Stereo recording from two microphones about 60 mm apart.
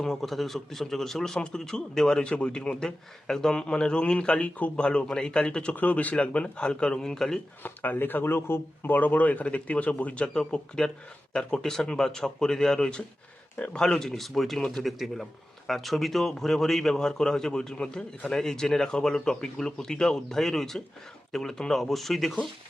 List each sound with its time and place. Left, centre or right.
0.0 s a man's voice: centre
5.7 s speech: left; by 7.3 s centre
7.6 s a man's voice: left
10.2 s a man's voice: centre